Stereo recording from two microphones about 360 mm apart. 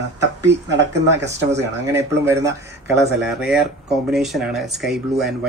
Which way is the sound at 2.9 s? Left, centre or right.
Right.